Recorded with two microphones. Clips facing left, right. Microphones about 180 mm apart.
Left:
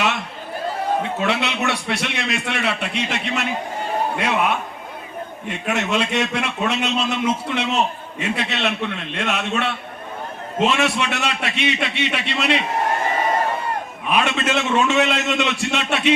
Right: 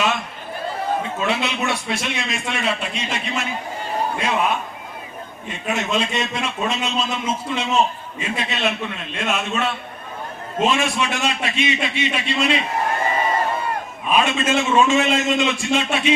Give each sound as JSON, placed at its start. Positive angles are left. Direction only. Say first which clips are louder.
{"t": 1.2, "sound": "speech", "louder": "left 1 dB", "side_deg": 65}
{"t": 5.5, "sound": "speech", "louder": "left 1 dB", "side_deg": 65}
{"t": 14.1, "sound": "speech", "louder": "right 1 dB", "side_deg": 65}